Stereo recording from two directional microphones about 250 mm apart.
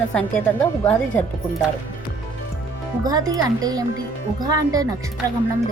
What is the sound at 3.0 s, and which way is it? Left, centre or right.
Speech, centre.